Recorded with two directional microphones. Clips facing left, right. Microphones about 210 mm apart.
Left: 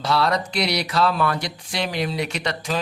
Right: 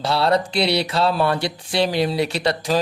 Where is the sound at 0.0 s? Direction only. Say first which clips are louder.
Right 3 dB; 30° right (ahead or behind).